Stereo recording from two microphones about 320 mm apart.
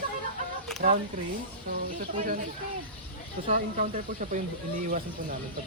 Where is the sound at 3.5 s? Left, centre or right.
Right.